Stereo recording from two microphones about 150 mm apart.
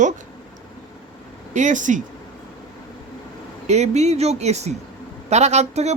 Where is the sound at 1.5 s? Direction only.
55° right (ahead or behind).